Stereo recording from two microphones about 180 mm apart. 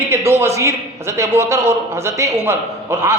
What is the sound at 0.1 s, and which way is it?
A woman's voice, 15° right (ahead or behind).